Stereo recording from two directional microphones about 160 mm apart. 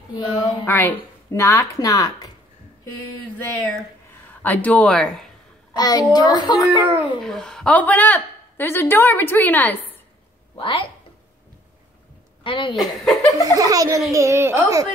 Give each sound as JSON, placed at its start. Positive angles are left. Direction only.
{"t": 0.1, "sound": "speech", "side_deg": 30}
{"t": 0.7, "sound": "speech", "side_deg": 10}
{"t": 3.3, "sound": "a woman's voice", "side_deg": 10}
{"t": 5.7, "sound": "a child's voice", "side_deg": 25}
{"t": 7.2, "sound": "a woman's voice", "side_deg": 5}
{"t": 10.6, "sound": "speech", "side_deg": 35}
{"t": 12.4, "sound": "speech", "side_deg": 30}
{"t": 12.7, "sound": "speech", "side_deg": 0}
{"t": 13.4, "sound": "a child's voice", "side_deg": -20}